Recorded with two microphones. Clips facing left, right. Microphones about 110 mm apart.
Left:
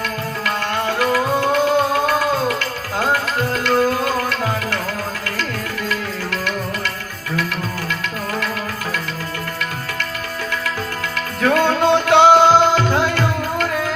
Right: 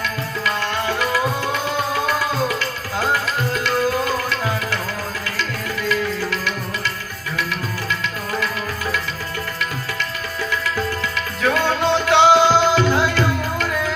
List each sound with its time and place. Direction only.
0.0 s music: 50° left (ahead or behind)
2.6 s tabla: 50° left (ahead or behind)
5.9 s music: 50° left (ahead or behind)
11.4 s music: 50° left (ahead or behind)